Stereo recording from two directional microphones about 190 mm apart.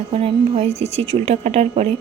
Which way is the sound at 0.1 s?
30° right (ahead or behind).